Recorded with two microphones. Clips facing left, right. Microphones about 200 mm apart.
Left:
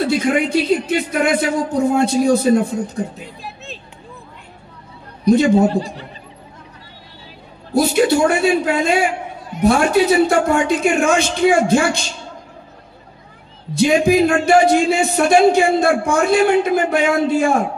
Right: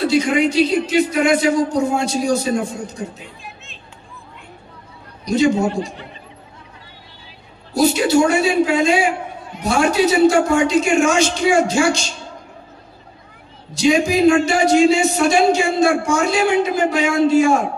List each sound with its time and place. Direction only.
0.1 s speech: 55° left (ahead or behind)
5.2 s a man's voice: 55° left (ahead or behind)
7.7 s speech: 55° left (ahead or behind)
13.7 s speech: 55° left (ahead or behind)